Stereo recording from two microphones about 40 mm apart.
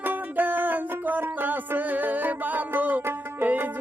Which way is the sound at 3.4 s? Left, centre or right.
Right.